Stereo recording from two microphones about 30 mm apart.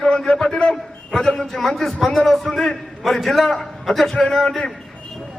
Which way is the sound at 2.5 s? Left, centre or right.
Centre.